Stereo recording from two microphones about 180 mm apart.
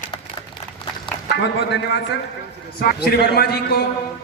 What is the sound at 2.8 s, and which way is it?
A man's voice, 60° left (ahead or behind).